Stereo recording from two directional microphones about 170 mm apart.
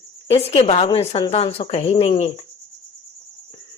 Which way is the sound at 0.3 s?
35° left (ahead or behind).